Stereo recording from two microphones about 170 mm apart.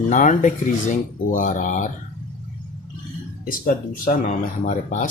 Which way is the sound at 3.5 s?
55° left (ahead or behind).